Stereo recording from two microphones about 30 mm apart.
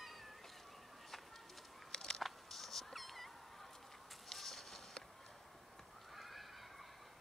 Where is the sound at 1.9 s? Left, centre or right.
Centre.